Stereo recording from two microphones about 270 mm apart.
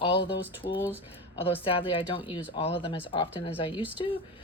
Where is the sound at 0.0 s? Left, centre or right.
Centre.